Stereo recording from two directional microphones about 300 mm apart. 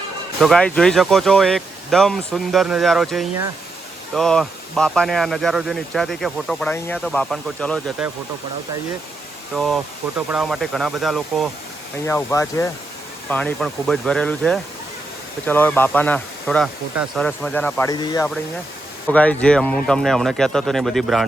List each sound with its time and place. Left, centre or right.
0.3 s speech: centre
9.6 s speech: centre